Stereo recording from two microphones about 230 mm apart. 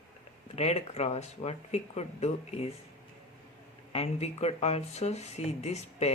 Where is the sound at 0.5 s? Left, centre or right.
Left.